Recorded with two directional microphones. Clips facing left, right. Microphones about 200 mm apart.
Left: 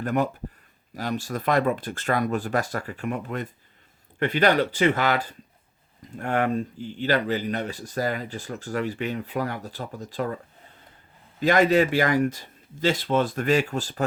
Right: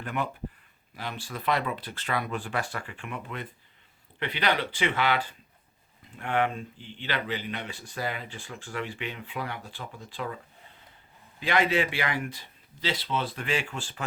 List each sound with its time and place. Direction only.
0.0 s a man's voice: 40° left (ahead or behind)